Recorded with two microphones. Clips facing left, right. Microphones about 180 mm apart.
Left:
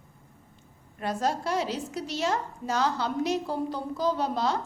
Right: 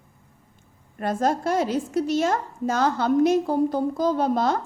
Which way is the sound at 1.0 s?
50° right (ahead or behind).